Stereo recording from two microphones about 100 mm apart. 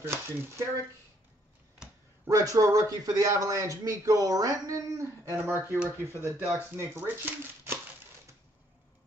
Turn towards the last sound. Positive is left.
turn(degrees=-20)  # may be behind; listen again after turning